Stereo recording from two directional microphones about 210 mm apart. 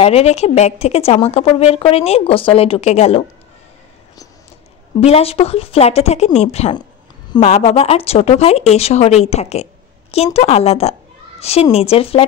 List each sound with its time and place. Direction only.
0.0 s speech: 30° left (ahead or behind)
5.0 s a child's voice: 30° left (ahead or behind)